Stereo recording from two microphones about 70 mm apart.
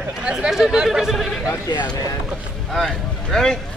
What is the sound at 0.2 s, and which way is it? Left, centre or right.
Speech, centre.